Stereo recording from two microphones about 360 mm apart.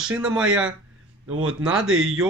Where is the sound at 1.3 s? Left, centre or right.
Right.